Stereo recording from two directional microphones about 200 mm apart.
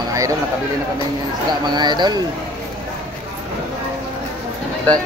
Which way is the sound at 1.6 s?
20° right (ahead or behind).